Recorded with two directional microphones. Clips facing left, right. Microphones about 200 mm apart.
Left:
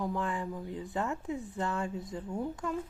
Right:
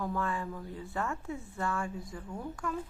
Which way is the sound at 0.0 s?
15° left (ahead or behind).